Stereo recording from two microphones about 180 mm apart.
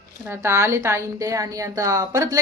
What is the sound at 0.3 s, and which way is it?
A woman's voice, 15° right (ahead or behind).